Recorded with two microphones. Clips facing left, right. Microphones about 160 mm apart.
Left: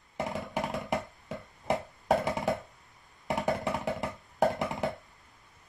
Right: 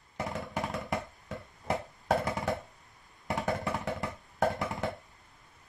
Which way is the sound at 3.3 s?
20° left (ahead or behind).